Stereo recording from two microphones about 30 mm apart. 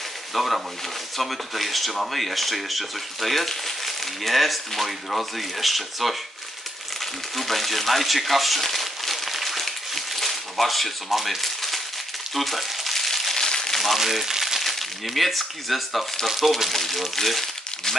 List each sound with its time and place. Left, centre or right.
0.3 s speech: centre
7.3 s speech: centre
8.6 s a sound: centre
12.4 s crumpling: centre
13.5 s a sound: centre
13.7 s crumpling: centre
14.6 s speech: centre